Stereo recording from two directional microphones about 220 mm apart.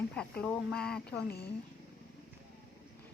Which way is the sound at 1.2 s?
45° left (ahead or behind).